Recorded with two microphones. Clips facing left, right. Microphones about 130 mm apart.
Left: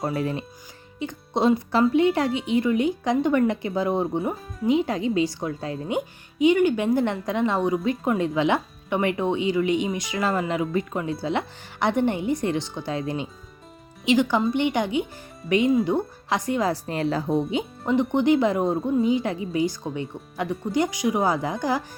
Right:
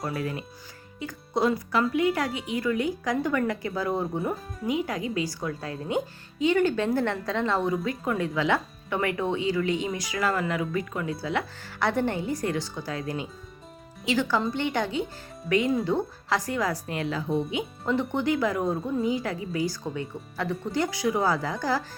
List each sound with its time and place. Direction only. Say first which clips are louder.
0.0 s a woman's voice: left 5 dB; 25° left (ahead or behind)
17.8 s speech: left 6 dB; 20° left (ahead or behind)